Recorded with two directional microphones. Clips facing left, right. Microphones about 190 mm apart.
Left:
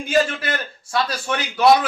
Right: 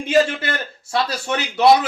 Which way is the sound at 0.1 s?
25° right (ahead or behind).